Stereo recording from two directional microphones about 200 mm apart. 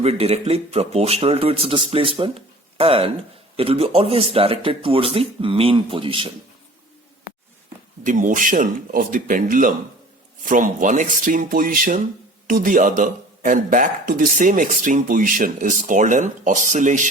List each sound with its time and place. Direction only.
0.0 s speech: 30° right (ahead or behind)
8.0 s speech: 40° right (ahead or behind)